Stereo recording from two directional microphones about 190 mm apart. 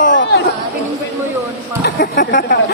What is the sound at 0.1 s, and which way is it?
Chatter, 75° left (ahead or behind).